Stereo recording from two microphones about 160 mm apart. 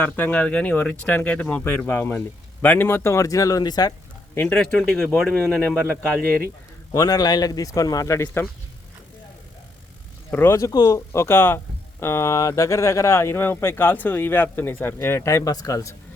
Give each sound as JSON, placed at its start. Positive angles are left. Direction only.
{"t": 0.0, "sound": "speech", "side_deg": 10}
{"t": 4.4, "sound": "speech", "side_deg": 10}
{"t": 6.9, "sound": "speech", "side_deg": 20}
{"t": 10.3, "sound": "speech", "side_deg": 15}